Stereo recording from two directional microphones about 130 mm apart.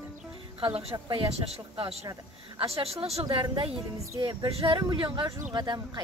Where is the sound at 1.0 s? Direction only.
45° right (ahead or behind).